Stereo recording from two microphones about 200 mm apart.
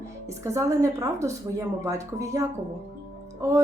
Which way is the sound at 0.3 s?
15° right (ahead or behind).